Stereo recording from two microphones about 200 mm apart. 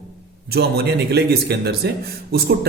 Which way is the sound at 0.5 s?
55° right (ahead or behind).